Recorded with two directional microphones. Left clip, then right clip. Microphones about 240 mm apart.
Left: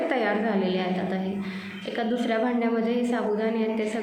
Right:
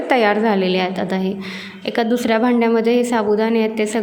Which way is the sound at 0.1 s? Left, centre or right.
Right.